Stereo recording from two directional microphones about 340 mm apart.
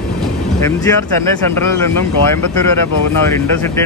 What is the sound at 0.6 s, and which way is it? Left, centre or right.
Speech, centre.